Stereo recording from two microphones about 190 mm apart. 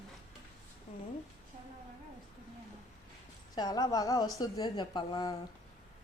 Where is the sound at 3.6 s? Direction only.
20° left (ahead or behind).